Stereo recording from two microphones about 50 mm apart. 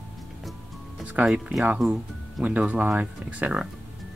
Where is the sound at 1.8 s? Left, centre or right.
Centre.